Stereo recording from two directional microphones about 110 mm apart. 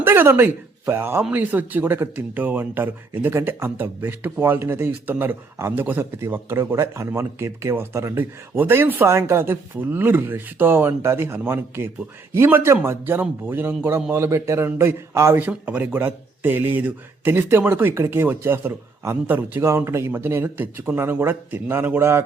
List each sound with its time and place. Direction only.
0.0 s speech: 20° right (ahead or behind)